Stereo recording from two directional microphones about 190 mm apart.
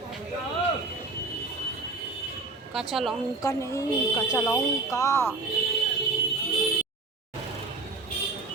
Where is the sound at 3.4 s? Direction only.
15° left (ahead or behind).